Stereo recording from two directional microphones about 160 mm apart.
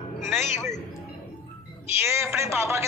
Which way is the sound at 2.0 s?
15° right (ahead or behind).